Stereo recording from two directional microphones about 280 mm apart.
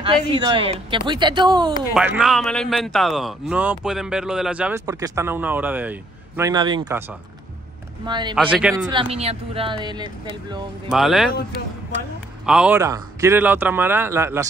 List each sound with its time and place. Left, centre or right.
0.0 s speech: centre
2.0 s a man's voice: centre
8.4 s a man's voice: centre
8.9 s speech: right
10.9 s a man's voice: centre
12.4 s speech: centre